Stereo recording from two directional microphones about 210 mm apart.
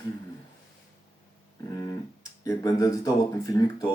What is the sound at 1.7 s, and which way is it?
Tick-tock, 15° left (ahead or behind).